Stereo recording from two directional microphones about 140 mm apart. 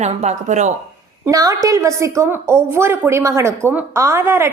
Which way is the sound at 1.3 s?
25° right (ahead or behind).